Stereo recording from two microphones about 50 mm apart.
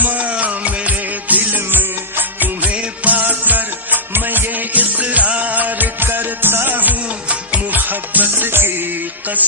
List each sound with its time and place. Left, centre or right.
0.0 s music: right